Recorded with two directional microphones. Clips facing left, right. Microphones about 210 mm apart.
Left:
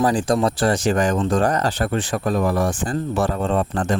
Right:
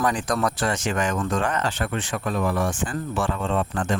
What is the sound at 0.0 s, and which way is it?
Speech, 30° left (ahead or behind).